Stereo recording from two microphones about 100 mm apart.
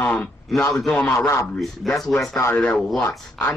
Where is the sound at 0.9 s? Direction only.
15° left (ahead or behind).